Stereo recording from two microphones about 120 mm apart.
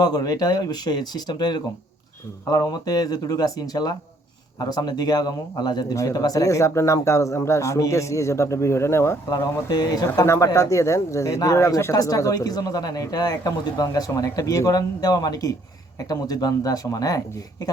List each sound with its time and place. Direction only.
0.0 s speech: 30° left (ahead or behind)